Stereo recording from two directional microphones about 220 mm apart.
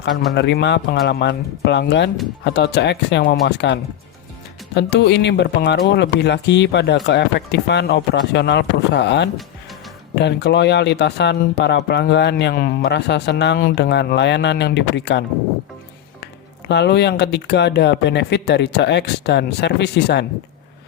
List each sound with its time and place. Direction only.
0.3 s speech: 50° left (ahead or behind)
16.2 s speech: 50° left (ahead or behind)